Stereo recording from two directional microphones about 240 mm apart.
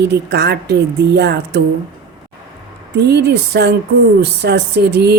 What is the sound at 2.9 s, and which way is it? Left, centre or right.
A woman's voice, right.